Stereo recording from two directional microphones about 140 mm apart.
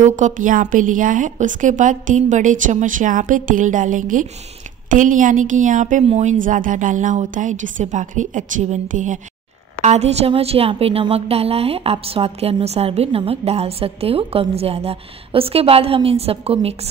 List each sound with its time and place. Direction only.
0.0 s a woman's voice: 60° right (ahead or behind)
6.0 s a woman's voice: 50° right (ahead or behind)
6.3 s a woman's voice: 70° right (ahead or behind)
9.8 s a woman's voice: 50° right (ahead or behind)